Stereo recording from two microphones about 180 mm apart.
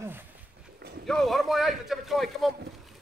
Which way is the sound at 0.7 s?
60° right (ahead or behind).